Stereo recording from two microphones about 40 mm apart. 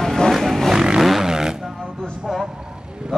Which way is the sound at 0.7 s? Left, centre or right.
Centre.